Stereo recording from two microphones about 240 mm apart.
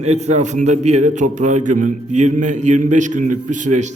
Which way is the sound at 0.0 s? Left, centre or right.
Right.